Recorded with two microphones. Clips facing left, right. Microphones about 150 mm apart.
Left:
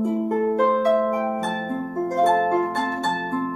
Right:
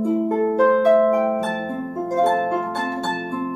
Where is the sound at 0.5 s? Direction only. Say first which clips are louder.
Right 5 dB; centre (ahead or behind).